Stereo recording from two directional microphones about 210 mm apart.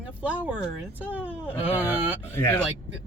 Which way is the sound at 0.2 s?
5° right (ahead or behind).